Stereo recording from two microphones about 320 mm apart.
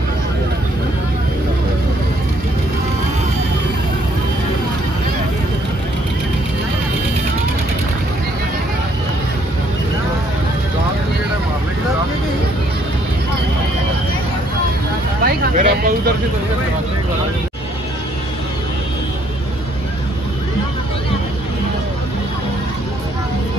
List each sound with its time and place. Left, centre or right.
15.2 s vehicle: right